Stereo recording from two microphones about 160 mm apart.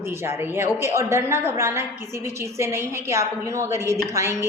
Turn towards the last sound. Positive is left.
turn(degrees=-20)  # may be behind; listen again after turning